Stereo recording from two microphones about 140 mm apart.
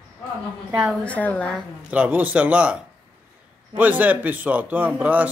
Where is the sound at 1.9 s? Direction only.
10° right (ahead or behind).